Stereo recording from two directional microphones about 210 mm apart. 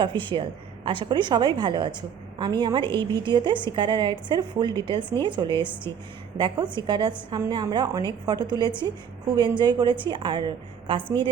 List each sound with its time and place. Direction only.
0.1 s a woman's voice: 20° right (ahead or behind)